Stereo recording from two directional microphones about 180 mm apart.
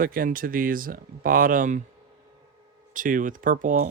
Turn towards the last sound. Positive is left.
turn(degrees=-45)  # may be behind; listen again after turning